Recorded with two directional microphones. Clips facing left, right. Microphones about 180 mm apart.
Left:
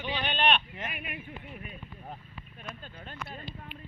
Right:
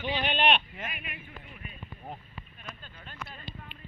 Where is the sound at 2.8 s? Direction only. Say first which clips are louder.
Left 3 dB; 40° left (ahead or behind).